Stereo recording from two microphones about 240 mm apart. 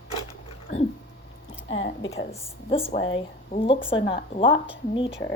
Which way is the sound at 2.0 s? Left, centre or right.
Centre.